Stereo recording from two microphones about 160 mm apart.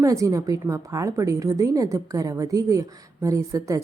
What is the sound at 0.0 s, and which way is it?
Speech, 20° right (ahead or behind).